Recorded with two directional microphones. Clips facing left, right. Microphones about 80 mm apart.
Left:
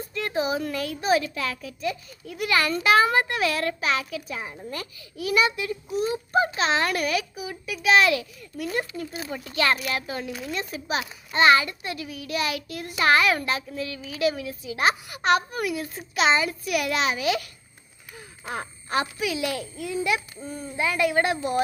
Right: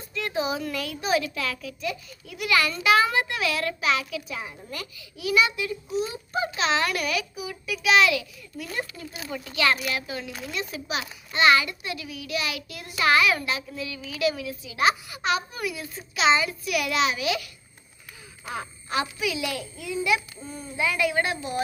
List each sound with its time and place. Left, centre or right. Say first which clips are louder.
0.1 s a child's voice: left 1 dB; left
18.5 s a child's voice: left 2 dB; left